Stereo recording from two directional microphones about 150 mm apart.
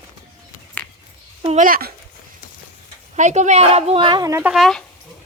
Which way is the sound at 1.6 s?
75° right (ahead or behind).